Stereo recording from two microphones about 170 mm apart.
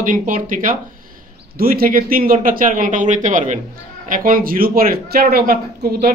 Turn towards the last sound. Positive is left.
turn(degrees=-65)  # may be behind; listen again after turning